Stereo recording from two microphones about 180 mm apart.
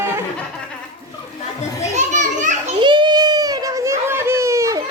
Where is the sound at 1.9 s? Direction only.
40° right (ahead or behind).